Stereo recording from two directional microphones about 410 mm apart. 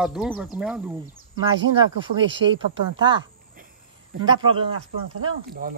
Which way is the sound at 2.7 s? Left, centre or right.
Centre.